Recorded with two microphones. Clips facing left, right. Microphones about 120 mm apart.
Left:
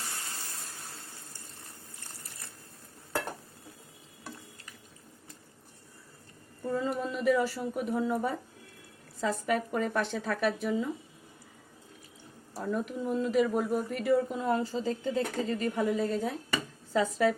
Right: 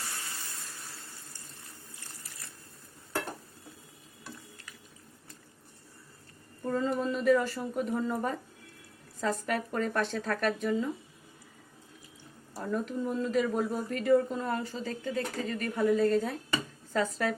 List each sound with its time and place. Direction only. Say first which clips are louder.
6.7 s speech: right 2 dB; 5° left (ahead or behind)
12.5 s speech: even; 10° left (ahead or behind)
14.6 s speech: left 4 dB; 30° left (ahead or behind)
15.7 s speech: right 8 dB; 15° left (ahead or behind)